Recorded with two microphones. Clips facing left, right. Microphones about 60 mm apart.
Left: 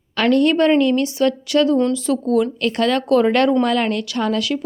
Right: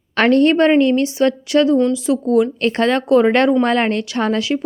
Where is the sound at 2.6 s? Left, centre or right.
Right.